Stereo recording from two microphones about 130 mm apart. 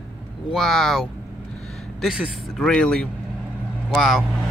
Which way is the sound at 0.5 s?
Centre (ahead or behind).